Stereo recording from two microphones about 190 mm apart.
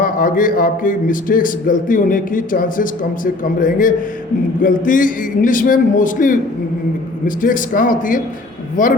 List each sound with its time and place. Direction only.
0.0 s speech: 45° left (ahead or behind)